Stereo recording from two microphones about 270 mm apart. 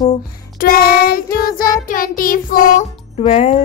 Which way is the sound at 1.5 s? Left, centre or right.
Left.